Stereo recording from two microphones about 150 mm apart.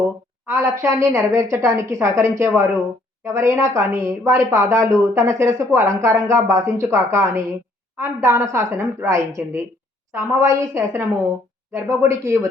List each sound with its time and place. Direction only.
0.4 s a woman's voice: 20° right (ahead or behind)